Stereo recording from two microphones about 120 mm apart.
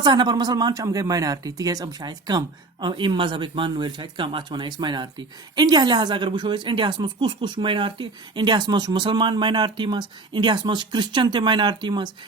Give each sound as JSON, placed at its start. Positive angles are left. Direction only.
{"t": 0.0, "sound": "speech", "side_deg": -40}